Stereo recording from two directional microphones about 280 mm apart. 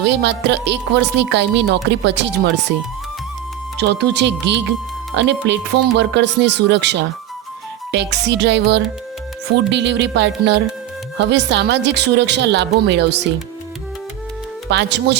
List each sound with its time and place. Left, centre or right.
0.0 s speech: right
3.8 s speech: right
14.7 s speech: right